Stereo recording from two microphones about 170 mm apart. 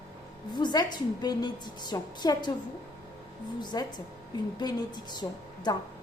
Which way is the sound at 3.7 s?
25° left (ahead or behind).